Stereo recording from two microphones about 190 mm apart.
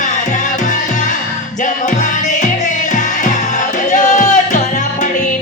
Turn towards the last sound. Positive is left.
turn(degrees=40)  # may be behind; listen again after turning